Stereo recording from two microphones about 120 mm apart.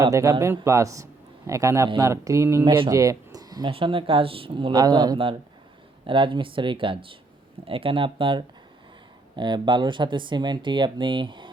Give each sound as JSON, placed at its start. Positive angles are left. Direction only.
{"t": 0.0, "sound": "speech", "side_deg": -25}
{"t": 2.6, "sound": "speech", "side_deg": -45}
{"t": 2.9, "sound": "a sound", "side_deg": -30}
{"t": 3.7, "sound": "speech", "side_deg": -45}